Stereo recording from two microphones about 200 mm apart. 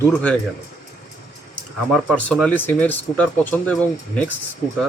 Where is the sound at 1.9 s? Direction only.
Centre (ahead or behind).